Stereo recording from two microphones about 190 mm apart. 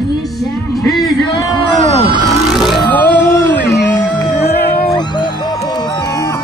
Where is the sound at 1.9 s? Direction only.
25° right (ahead or behind).